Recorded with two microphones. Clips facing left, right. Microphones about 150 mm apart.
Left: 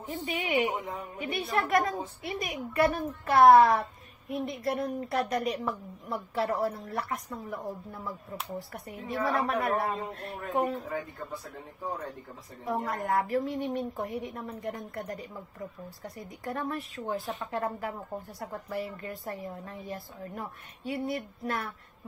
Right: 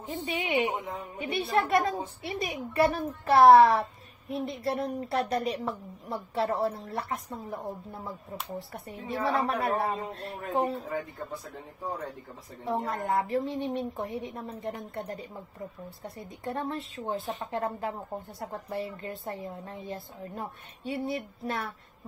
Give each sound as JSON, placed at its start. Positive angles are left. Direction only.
{"t": 0.0, "sound": "speech", "side_deg": -25}
{"t": 12.6, "sound": "speech", "side_deg": -30}